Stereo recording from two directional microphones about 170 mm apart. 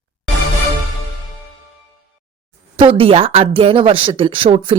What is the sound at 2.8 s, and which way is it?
Speech, 30° right (ahead or behind).